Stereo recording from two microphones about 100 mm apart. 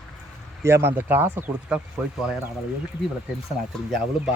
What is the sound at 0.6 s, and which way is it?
Speech, 25° right (ahead or behind).